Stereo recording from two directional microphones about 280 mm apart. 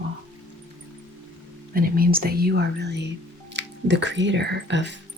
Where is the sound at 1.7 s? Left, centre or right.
Right.